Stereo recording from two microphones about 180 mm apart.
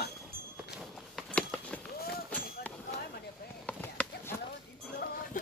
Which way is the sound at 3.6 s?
5° left (ahead or behind).